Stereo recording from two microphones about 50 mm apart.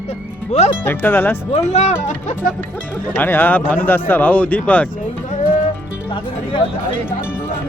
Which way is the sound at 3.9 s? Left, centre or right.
Left.